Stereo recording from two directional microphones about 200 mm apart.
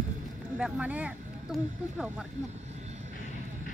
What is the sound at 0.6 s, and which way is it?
Speech, 5° right (ahead or behind).